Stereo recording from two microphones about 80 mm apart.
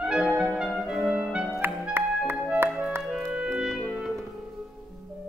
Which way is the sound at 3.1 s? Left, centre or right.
Centre.